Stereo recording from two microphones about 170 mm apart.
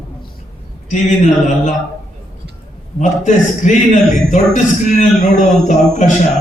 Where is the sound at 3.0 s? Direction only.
45° left (ahead or behind).